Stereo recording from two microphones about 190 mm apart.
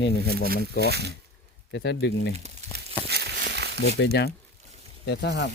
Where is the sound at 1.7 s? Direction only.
65° left (ahead or behind).